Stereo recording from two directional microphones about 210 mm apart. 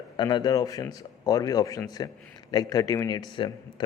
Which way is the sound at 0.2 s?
20° left (ahead or behind).